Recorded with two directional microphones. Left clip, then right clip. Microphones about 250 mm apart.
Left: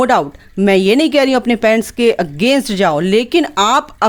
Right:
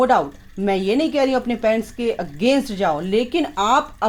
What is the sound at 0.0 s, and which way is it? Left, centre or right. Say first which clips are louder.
A woman's voice: left 4 dB; left.